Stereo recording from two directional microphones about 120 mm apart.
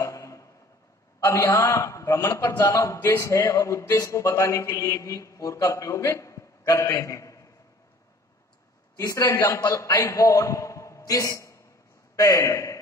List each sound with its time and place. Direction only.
0.0 s a sound: 25° left (ahead or behind)
1.2 s speech: 25° left (ahead or behind)
8.9 s a man's voice: 30° left (ahead or behind)